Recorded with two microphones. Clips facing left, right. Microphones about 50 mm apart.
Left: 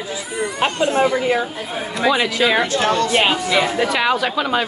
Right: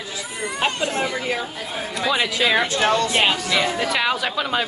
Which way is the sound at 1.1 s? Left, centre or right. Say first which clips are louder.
Left 6 dB; centre.